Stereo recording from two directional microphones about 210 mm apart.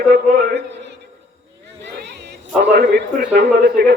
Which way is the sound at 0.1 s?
55° right (ahead or behind).